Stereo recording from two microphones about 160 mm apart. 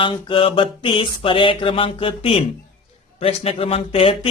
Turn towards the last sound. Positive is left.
turn(degrees=35)  # may be behind; listen again after turning